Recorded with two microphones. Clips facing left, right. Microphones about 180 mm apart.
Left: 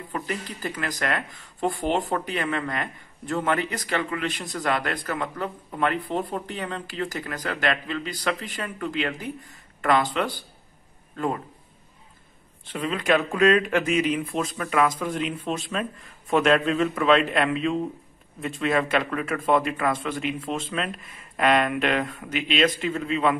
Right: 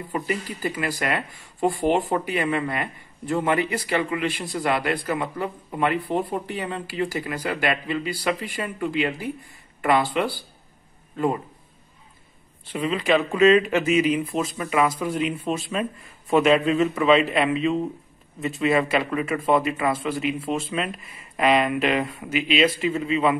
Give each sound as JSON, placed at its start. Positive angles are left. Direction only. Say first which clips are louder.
{"t": 0.1, "sound": "speech", "louder": "right 4 dB", "side_deg": -10}
{"t": 12.7, "sound": "speech", "louder": "right 2 dB", "side_deg": -5}